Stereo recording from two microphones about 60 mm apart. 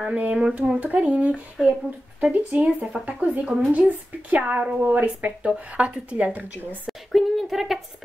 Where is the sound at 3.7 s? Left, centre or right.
Right.